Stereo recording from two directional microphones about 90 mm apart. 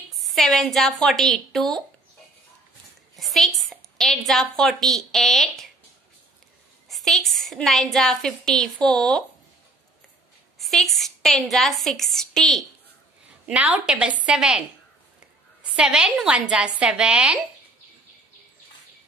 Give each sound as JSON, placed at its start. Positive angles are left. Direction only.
{"t": 0.1, "sound": "a woman's voice", "side_deg": 0}
{"t": 3.2, "sound": "a sound", "side_deg": 0}
{"t": 4.3, "sound": "a woman's voice", "side_deg": 5}
{"t": 6.9, "sound": "a woman's voice", "side_deg": 0}
{"t": 10.6, "sound": "a woman's voice", "side_deg": 0}
{"t": 13.5, "sound": "a woman's voice", "side_deg": -15}
{"t": 15.7, "sound": "a woman's voice", "side_deg": -10}